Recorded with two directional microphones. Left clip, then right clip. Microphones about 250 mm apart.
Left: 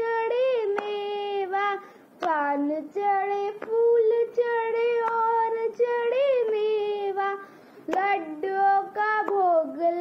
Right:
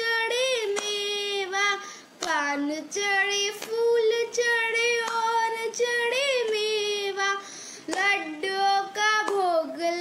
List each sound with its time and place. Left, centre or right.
0.0 s music: right
0.8 s child singing: right